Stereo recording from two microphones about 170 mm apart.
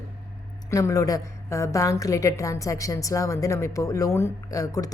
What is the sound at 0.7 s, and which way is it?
A woman's voice, 20° left (ahead or behind).